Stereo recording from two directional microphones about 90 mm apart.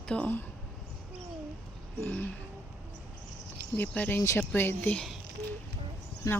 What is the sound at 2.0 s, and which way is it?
Speech, 15° left (ahead or behind).